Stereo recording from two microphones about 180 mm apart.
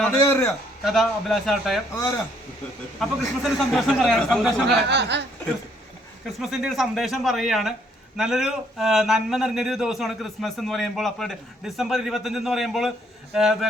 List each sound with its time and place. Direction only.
0.2 s a man's voice: 15° left (ahead or behind)
0.9 s a man's voice: centre (ahead or behind)
3.0 s a man's voice: centre (ahead or behind)
4.7 s speech: 70° right (ahead or behind)
6.2 s a man's voice: centre (ahead or behind)